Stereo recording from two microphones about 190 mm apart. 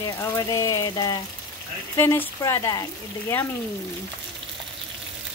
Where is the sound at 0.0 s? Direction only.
15° left (ahead or behind).